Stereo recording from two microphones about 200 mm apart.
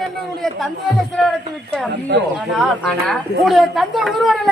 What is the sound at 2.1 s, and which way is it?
Speech, 60° right (ahead or behind).